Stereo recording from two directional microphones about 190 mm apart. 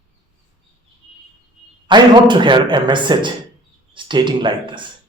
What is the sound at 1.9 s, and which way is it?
Speech, 25° right (ahead or behind).